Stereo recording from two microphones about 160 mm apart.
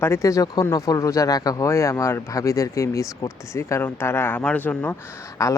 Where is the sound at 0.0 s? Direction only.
20° left (ahead or behind).